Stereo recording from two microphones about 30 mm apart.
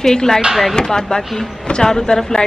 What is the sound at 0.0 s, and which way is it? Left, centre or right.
Speech, centre.